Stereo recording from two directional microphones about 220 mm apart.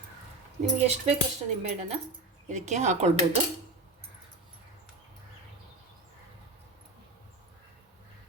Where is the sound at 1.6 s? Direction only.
30° right (ahead or behind).